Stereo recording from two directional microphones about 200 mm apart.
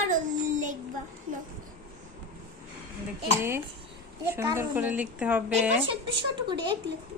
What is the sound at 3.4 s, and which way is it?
A woman's voice, 10° right (ahead or behind).